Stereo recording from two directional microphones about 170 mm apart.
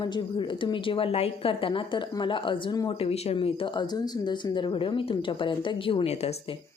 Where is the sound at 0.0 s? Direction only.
30° left (ahead or behind).